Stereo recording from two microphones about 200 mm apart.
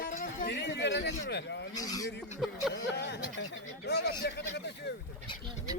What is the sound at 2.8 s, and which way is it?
Speech, 60° left (ahead or behind).